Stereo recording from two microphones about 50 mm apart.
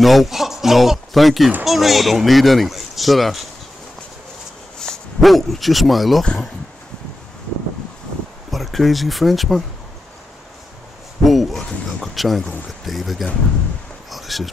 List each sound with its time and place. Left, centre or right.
0.0 s speech: centre
4.8 s dog: centre
5.2 s speech: centre
8.5 s speech: centre
11.2 s speech: centre
14.1 s a sound: centre